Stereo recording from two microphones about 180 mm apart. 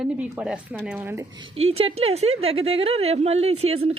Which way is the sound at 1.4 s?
35° right (ahead or behind).